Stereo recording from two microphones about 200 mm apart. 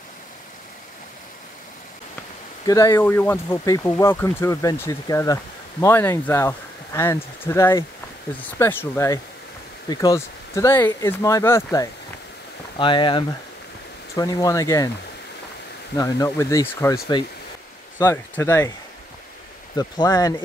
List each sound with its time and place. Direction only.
2.6 s speech: 15° left (ahead or behind)
16.0 s speech: 15° left (ahead or behind)
19.7 s speech: 20° left (ahead or behind)